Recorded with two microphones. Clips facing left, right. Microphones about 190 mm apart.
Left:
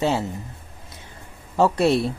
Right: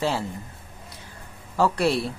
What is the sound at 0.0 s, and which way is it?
Speech, 20° left (ahead or behind).